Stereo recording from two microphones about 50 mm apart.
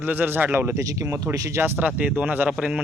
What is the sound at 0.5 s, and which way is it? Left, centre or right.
Speech, right.